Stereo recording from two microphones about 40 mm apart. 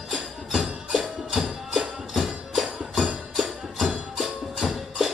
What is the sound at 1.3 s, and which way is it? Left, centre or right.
Music, centre.